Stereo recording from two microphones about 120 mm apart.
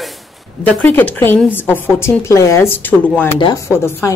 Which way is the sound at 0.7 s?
15° left (ahead or behind).